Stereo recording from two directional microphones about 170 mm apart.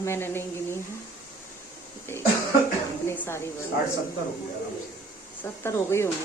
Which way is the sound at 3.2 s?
15° left (ahead or behind).